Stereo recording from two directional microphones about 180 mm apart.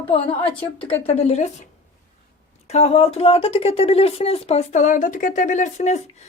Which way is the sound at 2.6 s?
35° left (ahead or behind).